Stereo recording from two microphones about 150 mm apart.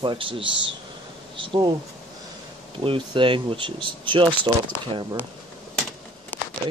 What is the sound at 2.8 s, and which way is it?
Speech, 35° right (ahead or behind).